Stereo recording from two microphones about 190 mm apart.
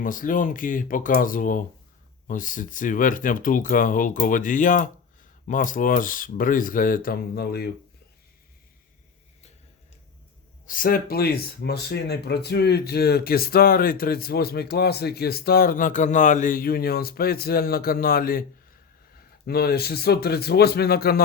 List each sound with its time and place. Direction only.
0.0 s speech: 45° left (ahead or behind)
10.7 s speech: 50° left (ahead or behind)
19.5 s speech: 55° left (ahead or behind)